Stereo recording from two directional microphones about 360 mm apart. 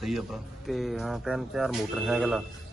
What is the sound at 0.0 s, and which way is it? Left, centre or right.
A man's voice, centre.